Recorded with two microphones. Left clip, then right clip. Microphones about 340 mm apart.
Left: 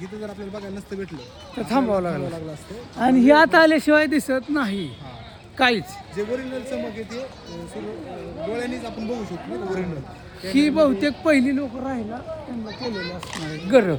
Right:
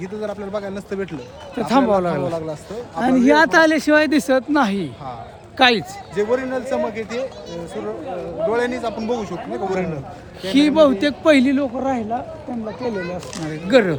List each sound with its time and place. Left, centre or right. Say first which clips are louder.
0.0 s a man's voice: right 7 dB; centre
8.5 s a man's voice: right 8 dB; centre
12.6 s a child's voice: right 5 dB; right
13.7 s speech: right 2 dB; centre